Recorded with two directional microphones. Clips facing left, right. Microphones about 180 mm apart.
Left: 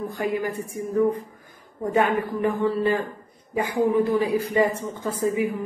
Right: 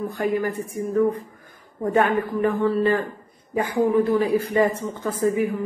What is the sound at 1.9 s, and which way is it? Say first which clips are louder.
A man's voice: right 2 dB; 15° left (ahead or behind).